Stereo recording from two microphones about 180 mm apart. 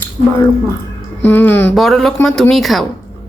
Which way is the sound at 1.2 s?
10° left (ahead or behind).